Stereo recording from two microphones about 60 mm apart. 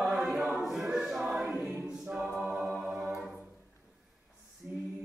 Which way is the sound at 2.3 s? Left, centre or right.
Centre.